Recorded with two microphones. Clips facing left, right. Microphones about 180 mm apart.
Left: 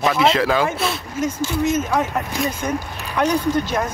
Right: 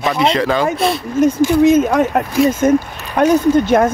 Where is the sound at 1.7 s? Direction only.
60° right (ahead or behind).